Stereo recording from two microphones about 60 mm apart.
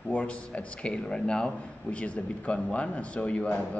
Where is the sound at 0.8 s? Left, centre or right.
Centre.